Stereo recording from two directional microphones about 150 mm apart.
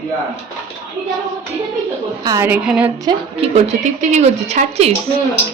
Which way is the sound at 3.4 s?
50° right (ahead or behind).